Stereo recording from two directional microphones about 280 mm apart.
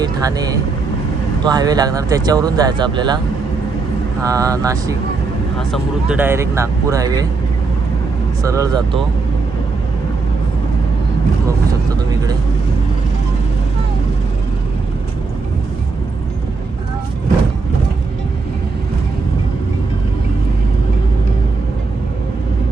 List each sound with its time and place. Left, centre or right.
0.0 s speech: centre
4.2 s speech: centre
5.5 s speech: centre
8.4 s speech: centre